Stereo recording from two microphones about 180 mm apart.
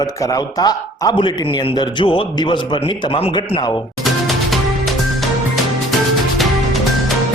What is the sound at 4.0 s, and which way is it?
Music, centre (ahead or behind).